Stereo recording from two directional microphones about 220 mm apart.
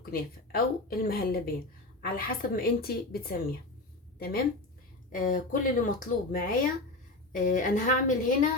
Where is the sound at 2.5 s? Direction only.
45° left (ahead or behind).